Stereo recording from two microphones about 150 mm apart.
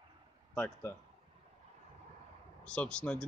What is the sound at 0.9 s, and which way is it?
Speech, 15° left (ahead or behind).